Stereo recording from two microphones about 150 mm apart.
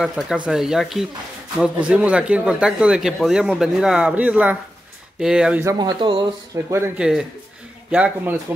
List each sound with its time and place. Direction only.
0.0 s speech: 5° right (ahead or behind)
5.6 s speech: 25° right (ahead or behind)
6.5 s speech: 20° right (ahead or behind)
7.0 s speech: 5° right (ahead or behind)